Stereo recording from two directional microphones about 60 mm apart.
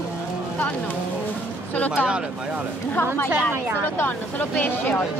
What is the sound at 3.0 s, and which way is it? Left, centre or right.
Speech, left.